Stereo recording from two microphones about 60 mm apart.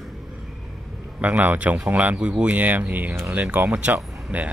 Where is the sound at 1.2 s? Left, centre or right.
Right.